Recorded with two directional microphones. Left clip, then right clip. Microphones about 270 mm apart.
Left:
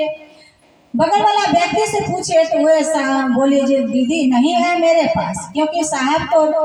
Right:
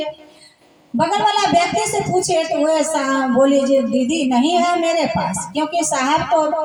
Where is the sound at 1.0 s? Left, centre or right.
Right.